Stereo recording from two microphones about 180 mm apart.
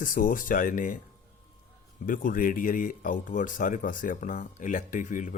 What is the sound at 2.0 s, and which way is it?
Speech, 50° left (ahead or behind).